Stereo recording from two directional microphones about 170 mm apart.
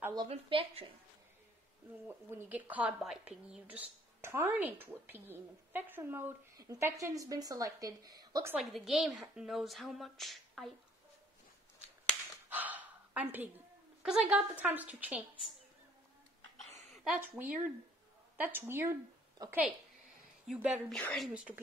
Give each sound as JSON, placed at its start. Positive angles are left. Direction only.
{"t": 0.3, "sound": "a woman's voice", "side_deg": -35}
{"t": 2.0, "sound": "speech", "side_deg": -10}
{"t": 8.5, "sound": "a woman's voice", "side_deg": 0}
{"t": 12.4, "sound": "a sound", "side_deg": -10}
{"t": 14.0, "sound": "speech", "side_deg": -5}
{"t": 16.9, "sound": "a woman's voice", "side_deg": 0}
{"t": 20.4, "sound": "a woman's voice", "side_deg": -5}